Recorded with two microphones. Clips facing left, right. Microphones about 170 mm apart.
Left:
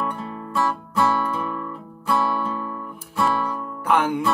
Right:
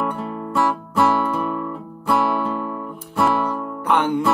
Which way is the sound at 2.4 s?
25° right (ahead or behind).